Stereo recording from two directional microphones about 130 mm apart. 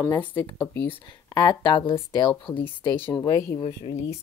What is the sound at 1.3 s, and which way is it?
Speech, 35° left (ahead or behind).